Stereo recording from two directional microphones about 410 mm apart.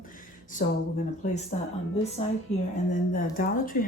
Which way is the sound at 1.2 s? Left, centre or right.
Centre.